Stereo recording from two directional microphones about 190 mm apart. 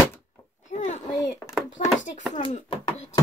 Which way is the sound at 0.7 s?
40° left (ahead or behind).